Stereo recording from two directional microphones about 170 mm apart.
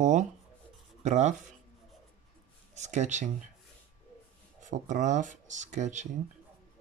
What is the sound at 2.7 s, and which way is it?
Speech, 40° right (ahead or behind).